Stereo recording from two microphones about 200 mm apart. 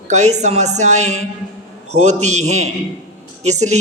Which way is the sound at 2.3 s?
35° right (ahead or behind).